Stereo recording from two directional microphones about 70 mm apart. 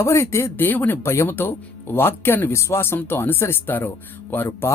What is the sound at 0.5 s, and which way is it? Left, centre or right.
Speech, left.